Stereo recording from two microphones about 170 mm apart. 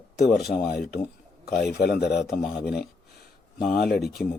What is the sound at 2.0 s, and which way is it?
Speech, 75° left (ahead or behind).